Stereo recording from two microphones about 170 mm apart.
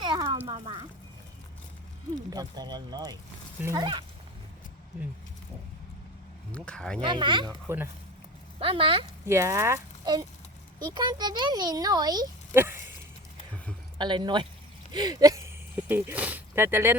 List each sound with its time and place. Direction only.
0.0 s a sound: 25° right (ahead or behind)
2.3 s speech: 25° right (ahead or behind)
6.5 s speech: 5° left (ahead or behind)
7.0 s speech: 30° right (ahead or behind)
8.5 s speech: 35° right (ahead or behind)
9.2 s speech: 15° right (ahead or behind)
12.5 s speech: 15° right (ahead or behind)
14.0 s speech: 25° right (ahead or behind)